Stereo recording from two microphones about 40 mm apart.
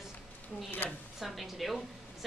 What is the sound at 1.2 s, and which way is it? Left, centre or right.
Speech, centre.